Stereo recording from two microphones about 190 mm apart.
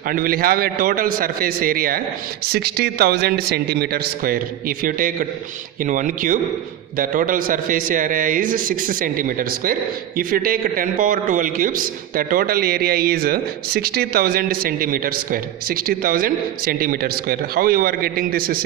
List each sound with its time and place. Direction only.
0.1 s a man's voice: 50° right (ahead or behind)